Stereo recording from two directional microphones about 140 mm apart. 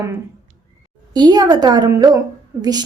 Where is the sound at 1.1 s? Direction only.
30° right (ahead or behind).